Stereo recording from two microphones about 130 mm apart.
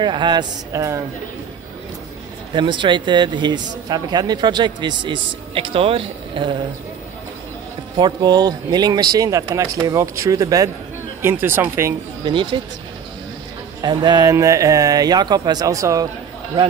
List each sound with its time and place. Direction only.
0.0 s speech: 35° right (ahead or behind)
2.5 s speech: 35° right (ahead or behind)
8.0 s speech: 30° right (ahead or behind)
11.2 s speech: 15° right (ahead or behind)
12.3 s speech: 40° right (ahead or behind)
13.7 s speech: 35° right (ahead or behind)
14.3 s speech: 25° right (ahead or behind)